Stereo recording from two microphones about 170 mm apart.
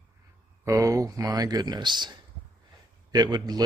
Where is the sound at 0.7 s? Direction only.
20° right (ahead or behind).